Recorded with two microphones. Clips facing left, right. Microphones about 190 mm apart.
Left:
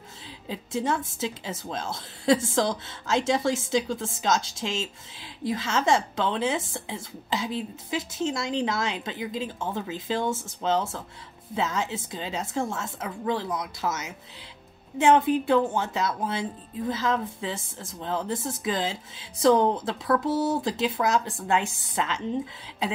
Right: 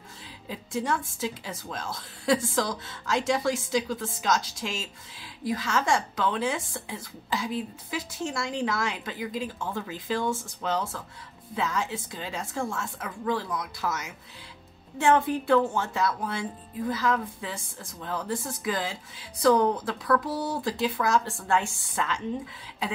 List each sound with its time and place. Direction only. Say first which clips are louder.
0.5 s a woman's voice: left 2 dB; 25° left (ahead or behind)